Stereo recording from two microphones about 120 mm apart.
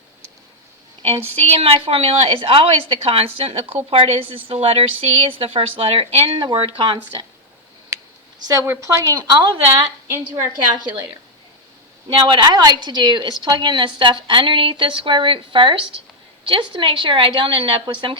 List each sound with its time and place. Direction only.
1.5 s a woman's voice: 55° right (ahead or behind)
6.4 s a woman's voice: 45° right (ahead or behind)
8.4 s a woman's voice: 20° right (ahead or behind)
9.0 s speech: 35° right (ahead or behind)
12.0 s a woman's voice: 35° right (ahead or behind)